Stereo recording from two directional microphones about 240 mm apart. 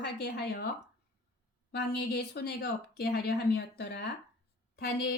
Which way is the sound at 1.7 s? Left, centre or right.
Left.